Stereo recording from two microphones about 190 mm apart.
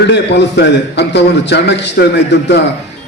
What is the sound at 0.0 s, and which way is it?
A man's voice, 65° left (ahead or behind).